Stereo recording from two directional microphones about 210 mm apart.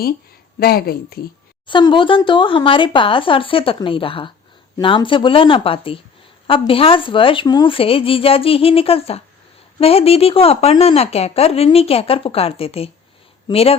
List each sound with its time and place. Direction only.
0.6 s speech: 45° left (ahead or behind)
1.6 s a woman's voice: 20° left (ahead or behind)